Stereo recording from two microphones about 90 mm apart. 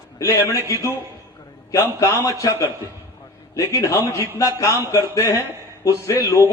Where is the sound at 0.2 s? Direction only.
30° left (ahead or behind).